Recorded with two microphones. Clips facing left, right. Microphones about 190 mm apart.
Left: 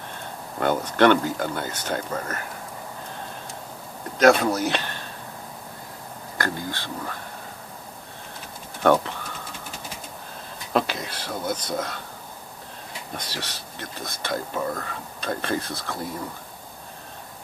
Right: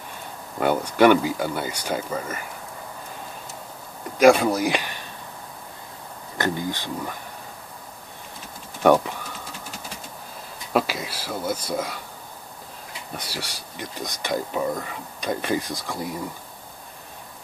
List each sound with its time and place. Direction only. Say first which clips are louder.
0.6 s speech: right 2 dB; 10° right (ahead or behind)
4.2 s speech: right 2 dB; 10° right (ahead or behind)
6.3 s speech: right 4 dB; 20° right (ahead or behind)
8.8 s speech: right 2 dB; 10° right (ahead or behind)
10.7 s speech: right 1 dB; 5° right (ahead or behind)
13.1 s speech: right 1 dB; 10° right (ahead or behind)